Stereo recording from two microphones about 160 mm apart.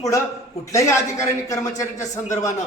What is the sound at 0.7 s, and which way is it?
Speech, 20° left (ahead or behind).